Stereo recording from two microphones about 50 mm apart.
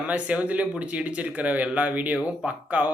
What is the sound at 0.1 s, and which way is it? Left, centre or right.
Speech, right.